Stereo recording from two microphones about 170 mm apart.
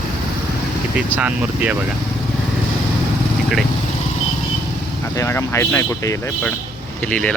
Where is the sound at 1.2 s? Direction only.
10° right (ahead or behind).